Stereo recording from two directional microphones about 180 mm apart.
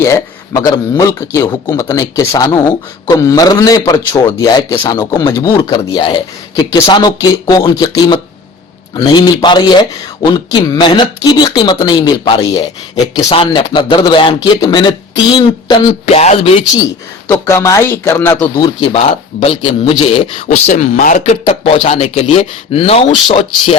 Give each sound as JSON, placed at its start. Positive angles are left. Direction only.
{"t": 0.0, "sound": "speech", "side_deg": 15}
{"t": 17.4, "sound": "speech", "side_deg": 15}
{"t": 18.5, "sound": "speech", "side_deg": 25}
{"t": 20.7, "sound": "speech", "side_deg": 40}